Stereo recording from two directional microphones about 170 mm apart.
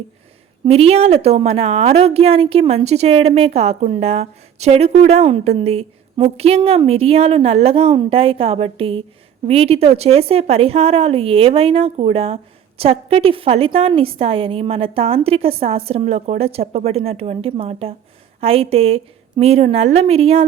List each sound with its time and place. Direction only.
0.6 s a woman's voice: 35° right (ahead or behind)